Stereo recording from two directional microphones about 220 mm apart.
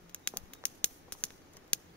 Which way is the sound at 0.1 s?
5° left (ahead or behind).